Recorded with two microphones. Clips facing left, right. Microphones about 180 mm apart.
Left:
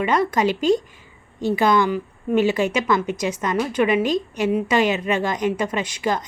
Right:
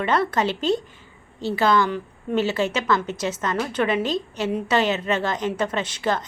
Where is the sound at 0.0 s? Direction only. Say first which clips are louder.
Left 2 dB; 10° left (ahead or behind).